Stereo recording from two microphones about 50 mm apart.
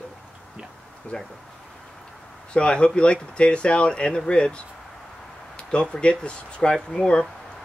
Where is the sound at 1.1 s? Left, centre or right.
Centre.